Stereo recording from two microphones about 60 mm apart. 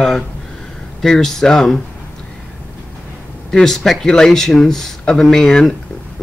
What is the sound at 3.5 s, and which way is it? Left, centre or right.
Speech, centre.